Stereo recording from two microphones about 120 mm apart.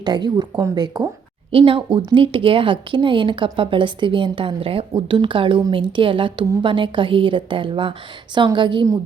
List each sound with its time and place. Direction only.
0.0 s speech: 35° right (ahead or behind)
1.5 s a woman's voice: 50° right (ahead or behind)